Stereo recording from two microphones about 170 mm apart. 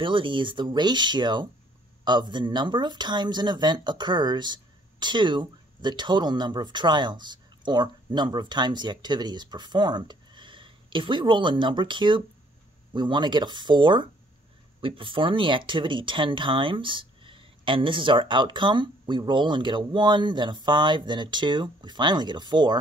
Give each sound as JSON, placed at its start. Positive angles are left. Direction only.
{"t": 0.0, "sound": "speech", "side_deg": -30}